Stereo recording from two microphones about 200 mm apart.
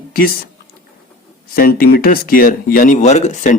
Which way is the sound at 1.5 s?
50° left (ahead or behind).